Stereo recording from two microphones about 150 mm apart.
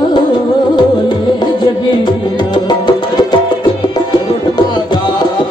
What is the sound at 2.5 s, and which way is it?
Music, 25° left (ahead or behind).